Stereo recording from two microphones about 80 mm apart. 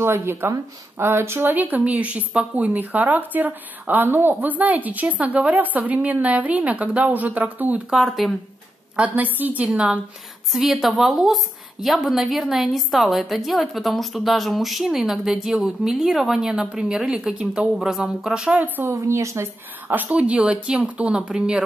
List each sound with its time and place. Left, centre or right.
0.0 s speech: right
7.9 s a woman's voice: centre
8.9 s speech: centre
9.7 s a woman's voice: centre
18.9 s speech: right
19.9 s speech: centre